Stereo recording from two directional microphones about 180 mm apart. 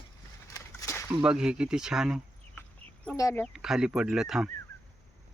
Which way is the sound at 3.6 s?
5° right (ahead or behind).